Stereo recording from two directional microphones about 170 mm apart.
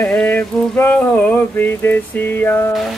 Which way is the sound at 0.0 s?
10° left (ahead or behind).